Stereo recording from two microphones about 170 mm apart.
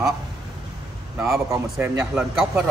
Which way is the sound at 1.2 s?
20° right (ahead or behind).